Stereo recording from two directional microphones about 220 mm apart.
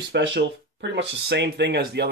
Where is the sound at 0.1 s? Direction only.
55° right (ahead or behind).